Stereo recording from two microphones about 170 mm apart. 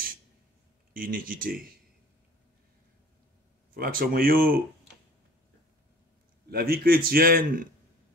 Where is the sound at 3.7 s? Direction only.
60° right (ahead or behind).